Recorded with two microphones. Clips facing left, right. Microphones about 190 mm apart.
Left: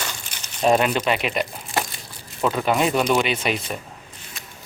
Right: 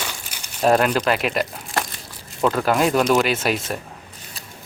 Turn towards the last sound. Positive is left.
turn(degrees=-5)  # may be behind; listen again after turning